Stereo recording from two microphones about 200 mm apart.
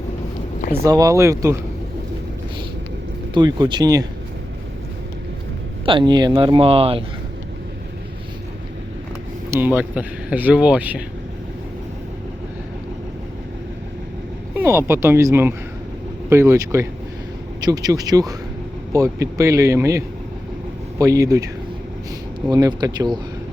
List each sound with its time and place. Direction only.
0.7 s speech: 15° right (ahead or behind)
3.3 s speech: 20° right (ahead or behind)
5.8 s speech: 25° right (ahead or behind)
9.5 s speech: 10° right (ahead or behind)
14.5 s speech: 10° right (ahead or behind)